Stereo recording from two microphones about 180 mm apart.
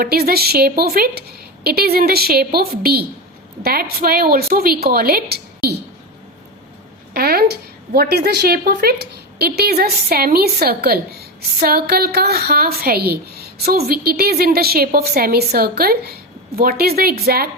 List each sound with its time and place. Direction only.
0.0 s a woman's voice: 55° right (ahead or behind)
7.1 s a sound: 60° right (ahead or behind)
7.9 s a woman's voice: 60° right (ahead or behind)